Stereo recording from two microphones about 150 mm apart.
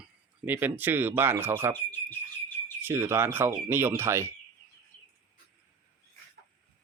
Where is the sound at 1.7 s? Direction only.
15° left (ahead or behind).